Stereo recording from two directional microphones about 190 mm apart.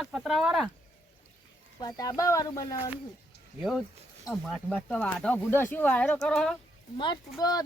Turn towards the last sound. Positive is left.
turn(degrees=20)  # may be behind; listen again after turning